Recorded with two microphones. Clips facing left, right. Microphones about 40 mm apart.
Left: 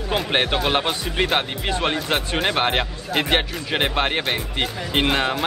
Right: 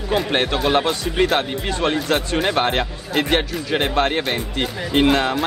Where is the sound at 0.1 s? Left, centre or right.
Centre.